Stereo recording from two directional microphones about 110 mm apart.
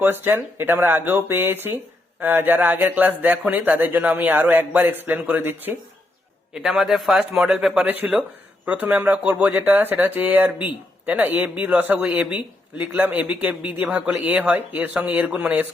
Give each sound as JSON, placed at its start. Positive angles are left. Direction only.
{"t": 0.0, "sound": "speech", "side_deg": -20}
{"t": 6.5, "sound": "a man's voice", "side_deg": -5}